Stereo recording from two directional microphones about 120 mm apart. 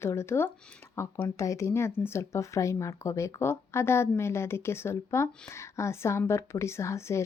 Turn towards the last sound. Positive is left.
turn(degrees=25)  # may be behind; listen again after turning